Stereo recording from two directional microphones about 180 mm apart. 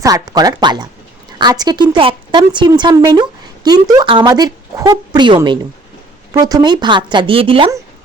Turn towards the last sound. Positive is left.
turn(degrees=-30)  # may be behind; listen again after turning